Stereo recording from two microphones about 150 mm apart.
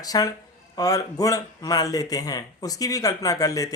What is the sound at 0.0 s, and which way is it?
Speech, 25° left (ahead or behind).